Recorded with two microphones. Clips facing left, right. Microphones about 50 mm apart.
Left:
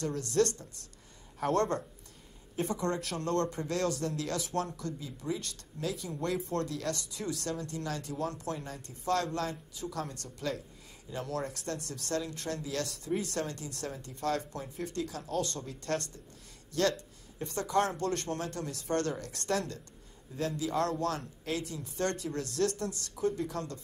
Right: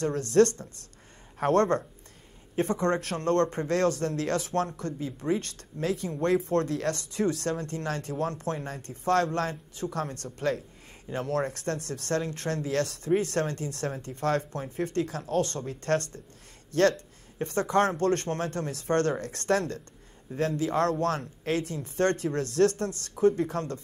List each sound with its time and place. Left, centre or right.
0.0 s speech: right